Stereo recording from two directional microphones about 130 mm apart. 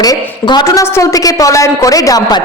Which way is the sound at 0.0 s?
30° left (ahead or behind).